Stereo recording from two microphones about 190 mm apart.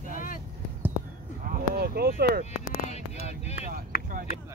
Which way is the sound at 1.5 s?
55° right (ahead or behind).